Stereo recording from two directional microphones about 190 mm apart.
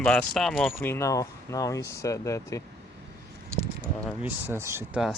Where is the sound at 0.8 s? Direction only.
15° left (ahead or behind).